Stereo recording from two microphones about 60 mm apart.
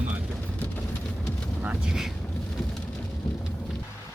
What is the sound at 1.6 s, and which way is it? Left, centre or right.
Speech, centre.